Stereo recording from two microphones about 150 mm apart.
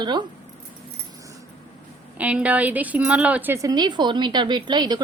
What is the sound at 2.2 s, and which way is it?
A woman's voice, 10° right (ahead or behind).